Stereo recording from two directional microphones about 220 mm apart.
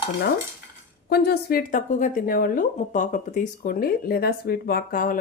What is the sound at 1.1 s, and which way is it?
A woman's voice, 45° left (ahead or behind).